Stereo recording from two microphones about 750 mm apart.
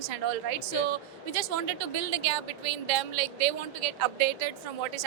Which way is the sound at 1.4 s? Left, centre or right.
Right.